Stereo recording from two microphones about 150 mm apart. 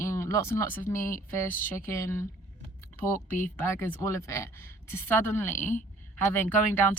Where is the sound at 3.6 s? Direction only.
15° left (ahead or behind).